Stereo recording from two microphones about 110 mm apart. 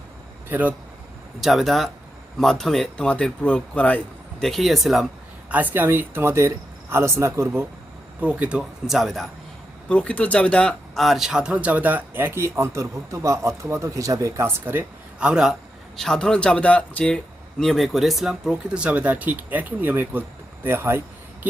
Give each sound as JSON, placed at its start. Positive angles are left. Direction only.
{"t": 1.4, "sound": "speech", "side_deg": 0}
{"t": 4.4, "sound": "speech", "side_deg": 0}
{"t": 5.5, "sound": "speech", "side_deg": -15}
{"t": 8.2, "sound": "speech", "side_deg": -10}
{"t": 9.9, "sound": "speech", "side_deg": 10}
{"t": 16.0, "sound": "speech", "side_deg": 5}